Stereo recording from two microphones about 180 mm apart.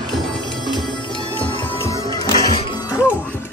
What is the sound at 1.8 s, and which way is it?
Music, 20° left (ahead or behind).